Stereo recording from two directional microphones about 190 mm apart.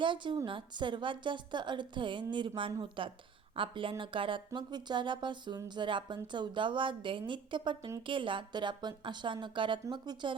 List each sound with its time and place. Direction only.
0.0 s speech: 25° right (ahead or behind)